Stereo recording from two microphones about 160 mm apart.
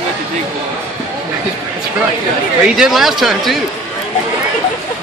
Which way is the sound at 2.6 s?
5° right (ahead or behind).